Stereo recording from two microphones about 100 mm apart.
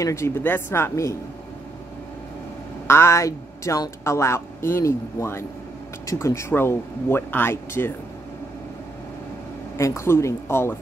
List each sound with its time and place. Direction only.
0.0 s speech: 25° left (ahead or behind)
2.9 s speech: 25° left (ahead or behind)
9.8 s speech: 30° left (ahead or behind)